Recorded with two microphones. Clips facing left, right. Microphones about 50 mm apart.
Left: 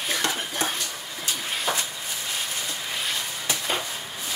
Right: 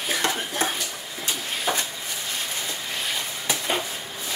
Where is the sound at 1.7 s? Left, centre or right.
Centre.